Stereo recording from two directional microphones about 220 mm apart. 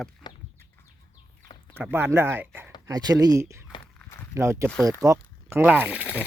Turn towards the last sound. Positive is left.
turn(degrees=-5)  # may be behind; listen again after turning